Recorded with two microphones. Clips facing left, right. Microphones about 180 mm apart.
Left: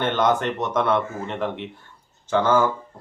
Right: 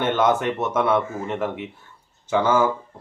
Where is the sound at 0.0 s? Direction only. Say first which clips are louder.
Right 1 dB; 10° right (ahead or behind).